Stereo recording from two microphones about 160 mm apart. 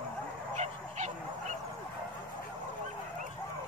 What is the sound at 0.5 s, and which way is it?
Goose, 45° right (ahead or behind).